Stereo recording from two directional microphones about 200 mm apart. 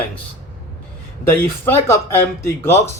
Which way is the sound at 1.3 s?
10° left (ahead or behind).